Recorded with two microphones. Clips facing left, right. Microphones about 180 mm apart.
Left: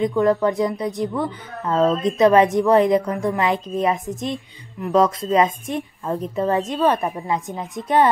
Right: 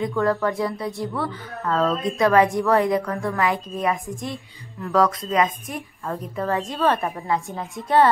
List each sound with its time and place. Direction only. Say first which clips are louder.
0.0 s a woman's voice: left 4 dB; 20° left (ahead or behind)